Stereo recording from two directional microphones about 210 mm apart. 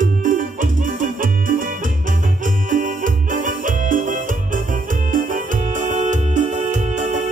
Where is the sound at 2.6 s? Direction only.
40° right (ahead or behind).